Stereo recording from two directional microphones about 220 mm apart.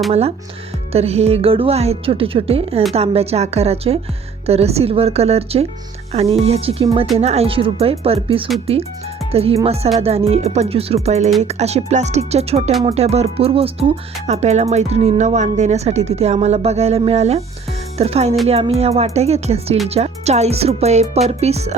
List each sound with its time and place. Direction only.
0.1 s speech: 25° right (ahead or behind)